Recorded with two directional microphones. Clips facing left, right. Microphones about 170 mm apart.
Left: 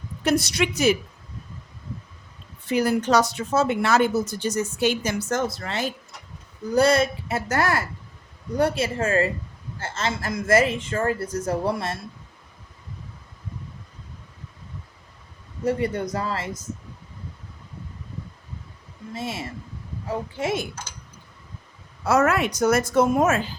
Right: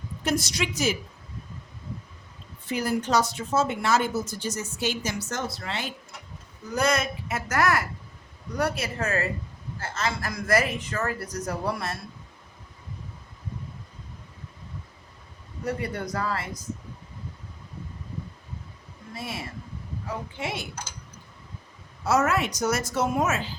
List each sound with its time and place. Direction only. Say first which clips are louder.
0.3 s speech: left 5 dB; 65° left (ahead or behind)
2.6 s speech: left 5 dB; 75° left (ahead or behind); by 5.9 s 45° left (ahead or behind)
6.7 s speech: left 6 dB; 30° left (ahead or behind)
15.6 s speech: left 6 dB; 20° left (ahead or behind)
19.1 s speech: left 4 dB; 25° left (ahead or behind)
20.4 s speech: left 8 dB; 45° left (ahead or behind)
22.0 s speech: left 3 dB; 60° left (ahead or behind)